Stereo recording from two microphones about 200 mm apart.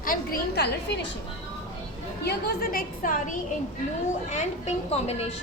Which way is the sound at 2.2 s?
50° left (ahead or behind).